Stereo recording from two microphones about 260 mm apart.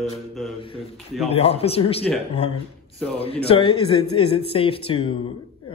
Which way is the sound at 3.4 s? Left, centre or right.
Left.